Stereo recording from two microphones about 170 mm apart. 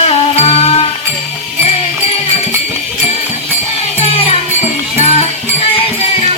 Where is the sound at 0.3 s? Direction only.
35° left (ahead or behind).